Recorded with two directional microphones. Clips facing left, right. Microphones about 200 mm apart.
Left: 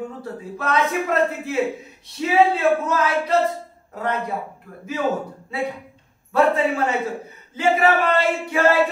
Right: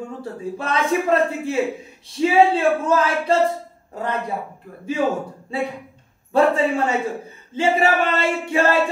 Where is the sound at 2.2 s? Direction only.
30° right (ahead or behind).